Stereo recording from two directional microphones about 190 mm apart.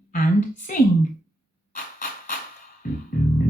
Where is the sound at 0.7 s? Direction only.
45° left (ahead or behind).